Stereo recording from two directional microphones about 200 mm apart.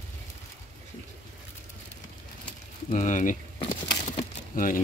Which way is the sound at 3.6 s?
25° left (ahead or behind).